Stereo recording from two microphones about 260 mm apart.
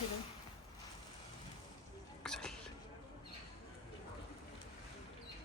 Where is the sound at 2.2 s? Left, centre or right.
Centre.